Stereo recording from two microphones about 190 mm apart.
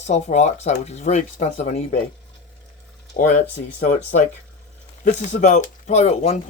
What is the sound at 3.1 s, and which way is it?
Speech, 45° left (ahead or behind).